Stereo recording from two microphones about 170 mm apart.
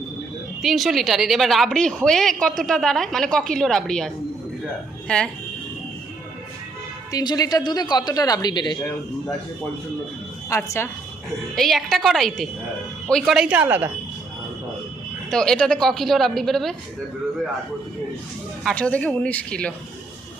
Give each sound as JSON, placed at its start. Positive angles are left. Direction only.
{"t": 0.6, "sound": "a woman's voice", "side_deg": 0}
{"t": 7.1, "sound": "speech", "side_deg": 20}
{"t": 10.5, "sound": "speech", "side_deg": 15}
{"t": 11.5, "sound": "a woman's voice", "side_deg": 0}
{"t": 15.3, "sound": "a woman's voice", "side_deg": 5}
{"t": 18.6, "sound": "speech", "side_deg": 5}